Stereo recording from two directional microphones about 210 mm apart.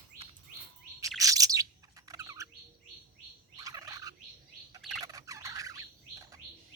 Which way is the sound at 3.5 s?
15° right (ahead or behind).